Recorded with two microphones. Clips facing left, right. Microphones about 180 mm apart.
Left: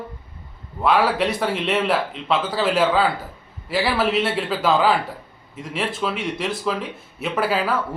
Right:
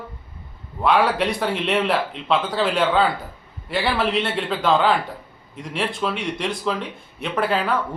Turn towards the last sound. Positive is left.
turn(degrees=5)  # may be behind; listen again after turning